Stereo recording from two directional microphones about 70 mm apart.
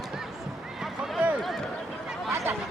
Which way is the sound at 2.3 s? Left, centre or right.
Right.